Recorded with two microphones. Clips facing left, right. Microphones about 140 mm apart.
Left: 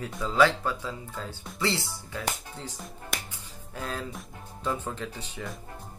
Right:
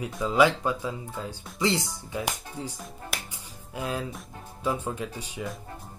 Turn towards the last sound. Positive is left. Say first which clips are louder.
# right 3 dB
turn(degrees=-10)  # may be behind; listen again after turning